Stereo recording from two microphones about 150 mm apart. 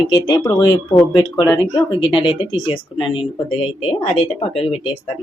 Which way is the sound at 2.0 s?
35° left (ahead or behind).